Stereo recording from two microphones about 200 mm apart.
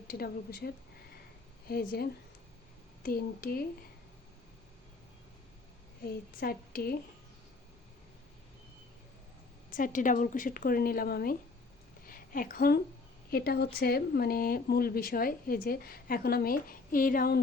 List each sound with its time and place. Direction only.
0.1 s speech: 50° left (ahead or behind)
6.1 s speech: 50° left (ahead or behind)
9.7 s a woman's voice: 40° left (ahead or behind)